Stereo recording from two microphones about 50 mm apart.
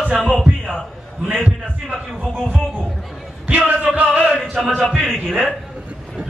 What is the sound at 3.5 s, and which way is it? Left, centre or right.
Music, right.